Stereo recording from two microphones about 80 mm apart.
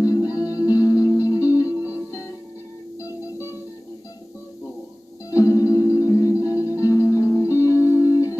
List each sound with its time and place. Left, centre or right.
0.0 s music: left
1.0 s music: right
1.6 s music: left
3.0 s music: left
5.3 s music: left